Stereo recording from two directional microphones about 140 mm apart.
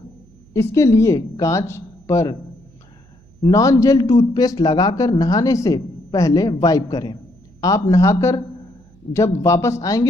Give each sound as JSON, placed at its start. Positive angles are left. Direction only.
{"t": 0.5, "sound": "a man's voice", "side_deg": 20}
{"t": 3.4, "sound": "a man's voice", "side_deg": 25}